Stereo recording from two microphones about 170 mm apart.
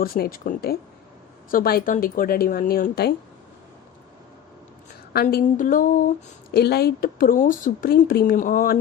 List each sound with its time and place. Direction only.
0.0 s speech: 60° left (ahead or behind)
5.1 s a sound: 55° left (ahead or behind)
6.5 s speech: 70° left (ahead or behind)